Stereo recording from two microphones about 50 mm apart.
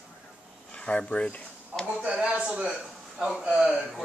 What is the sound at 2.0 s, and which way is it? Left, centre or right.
A man's voice, right.